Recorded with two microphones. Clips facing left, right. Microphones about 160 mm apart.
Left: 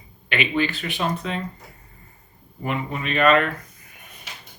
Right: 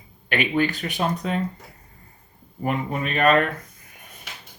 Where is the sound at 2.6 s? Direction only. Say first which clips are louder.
Right 2 dB; 40° right (ahead or behind).